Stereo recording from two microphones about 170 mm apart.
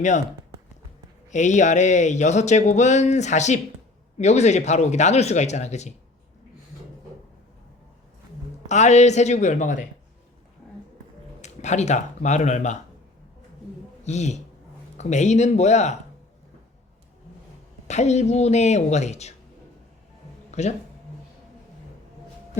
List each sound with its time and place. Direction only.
1.3 s speech: 45° left (ahead or behind)
8.6 s speech: 45° left (ahead or behind)
11.4 s speech: 40° left (ahead or behind)
14.0 s a man's voice: 40° left (ahead or behind)
17.8 s speech: 40° left (ahead or behind)
20.6 s speech: 40° left (ahead or behind)